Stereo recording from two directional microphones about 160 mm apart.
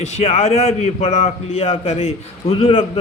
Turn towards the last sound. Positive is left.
turn(degrees=40)  # may be behind; listen again after turning